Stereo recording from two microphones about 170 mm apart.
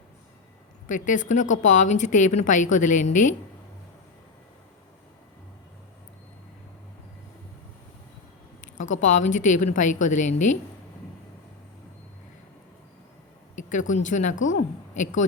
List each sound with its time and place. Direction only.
0.9 s a woman's voice: 50° left (ahead or behind)
8.6 s a woman's voice: 45° left (ahead or behind)
13.7 s a woman's voice: 45° left (ahead or behind)